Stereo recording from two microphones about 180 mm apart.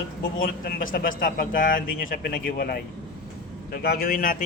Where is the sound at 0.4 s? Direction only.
55° left (ahead or behind).